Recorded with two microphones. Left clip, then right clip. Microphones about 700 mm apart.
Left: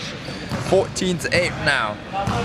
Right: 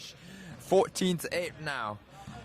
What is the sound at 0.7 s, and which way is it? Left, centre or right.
Speech, right.